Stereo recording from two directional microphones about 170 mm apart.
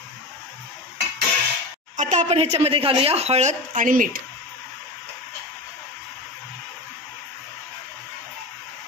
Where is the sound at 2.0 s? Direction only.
45° right (ahead or behind).